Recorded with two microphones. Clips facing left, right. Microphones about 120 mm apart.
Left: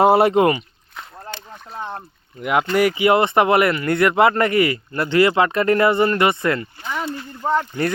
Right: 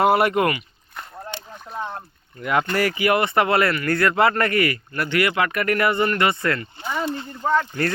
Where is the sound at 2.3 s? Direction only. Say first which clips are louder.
Left 3 dB; 10° left (ahead or behind).